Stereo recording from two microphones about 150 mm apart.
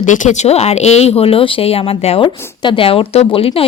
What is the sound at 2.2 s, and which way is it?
A woman's voice, 30° left (ahead or behind).